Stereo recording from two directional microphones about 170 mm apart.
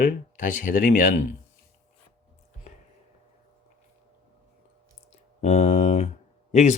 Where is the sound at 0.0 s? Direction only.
50° left (ahead or behind).